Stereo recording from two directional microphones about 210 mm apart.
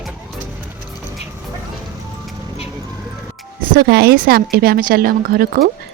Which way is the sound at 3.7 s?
50° right (ahead or behind).